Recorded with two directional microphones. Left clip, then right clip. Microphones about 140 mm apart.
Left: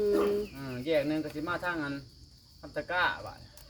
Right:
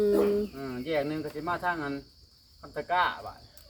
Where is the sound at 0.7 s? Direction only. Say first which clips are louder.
Left 2 dB; 10° right (ahead or behind).